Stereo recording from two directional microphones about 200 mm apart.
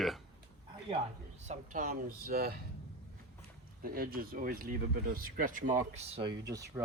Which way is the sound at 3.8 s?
45° right (ahead or behind).